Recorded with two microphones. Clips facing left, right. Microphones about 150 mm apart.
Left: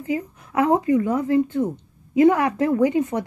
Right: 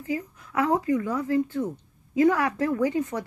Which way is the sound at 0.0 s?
20° left (ahead or behind).